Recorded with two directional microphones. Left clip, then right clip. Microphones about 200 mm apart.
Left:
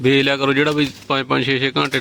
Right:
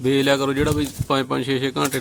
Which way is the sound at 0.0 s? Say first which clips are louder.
Left 3 dB; 25° left (ahead or behind).